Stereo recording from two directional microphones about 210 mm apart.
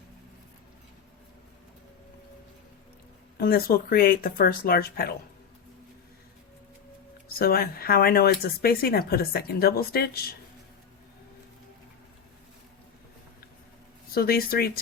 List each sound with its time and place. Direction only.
3.3 s speech: 45° left (ahead or behind)
7.3 s speech: 45° left (ahead or behind)
14.1 s speech: 45° left (ahead or behind)